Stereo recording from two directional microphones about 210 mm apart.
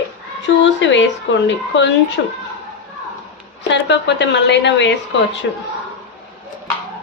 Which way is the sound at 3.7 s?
55° left (ahead or behind).